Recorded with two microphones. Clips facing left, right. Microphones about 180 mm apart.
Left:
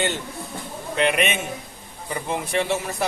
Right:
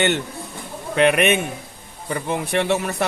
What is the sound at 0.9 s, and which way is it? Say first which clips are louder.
A man's voice: right 5 dB; 60° right (ahead or behind).